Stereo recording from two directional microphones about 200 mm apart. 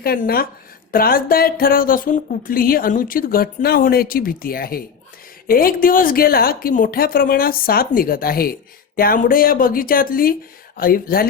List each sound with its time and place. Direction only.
0.0 s speech: 50° left (ahead or behind)